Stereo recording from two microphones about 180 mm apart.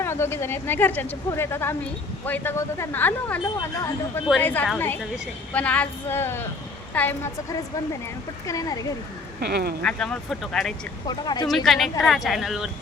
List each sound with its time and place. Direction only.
0.0 s speech: 15° left (ahead or behind)
8.4 s speech: 20° left (ahead or behind)
9.4 s speech: 60° right (ahead or behind)
9.8 s speech: 5° left (ahead or behind)
11.0 s speech: 25° left (ahead or behind)
11.4 s speech: centre (ahead or behind)